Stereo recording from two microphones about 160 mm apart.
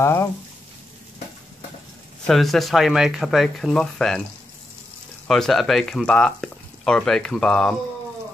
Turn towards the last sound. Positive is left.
turn(degrees=5)  # may be behind; listen again after turning